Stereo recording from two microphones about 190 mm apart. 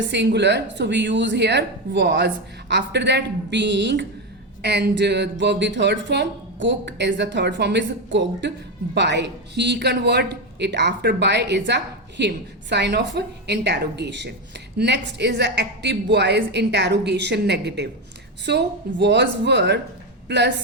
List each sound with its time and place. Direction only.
0.0 s a woman's voice: 65° right (ahead or behind)